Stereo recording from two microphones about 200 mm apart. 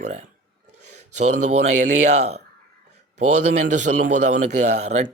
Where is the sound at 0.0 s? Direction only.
35° right (ahead or behind).